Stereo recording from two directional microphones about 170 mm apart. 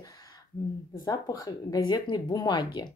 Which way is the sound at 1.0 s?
20° left (ahead or behind).